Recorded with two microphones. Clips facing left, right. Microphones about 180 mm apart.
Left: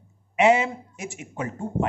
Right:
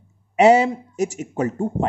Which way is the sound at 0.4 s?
40° right (ahead or behind).